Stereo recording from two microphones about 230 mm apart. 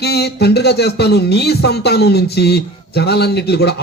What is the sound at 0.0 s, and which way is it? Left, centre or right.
Speech, left.